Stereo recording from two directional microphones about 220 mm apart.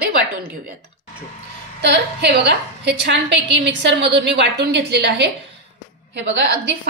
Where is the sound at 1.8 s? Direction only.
50° right (ahead or behind).